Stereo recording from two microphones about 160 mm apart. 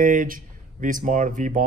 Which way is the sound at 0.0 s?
55° right (ahead or behind).